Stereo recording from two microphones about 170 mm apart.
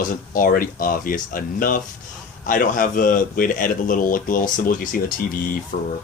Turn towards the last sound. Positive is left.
turn(degrees=60)  # may be behind; listen again after turning